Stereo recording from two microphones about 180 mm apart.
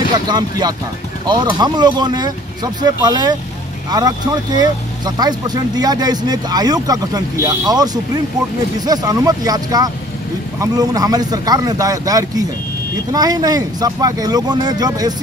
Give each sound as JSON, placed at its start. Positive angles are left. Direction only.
{"t": 0.3, "sound": "speech", "side_deg": -20}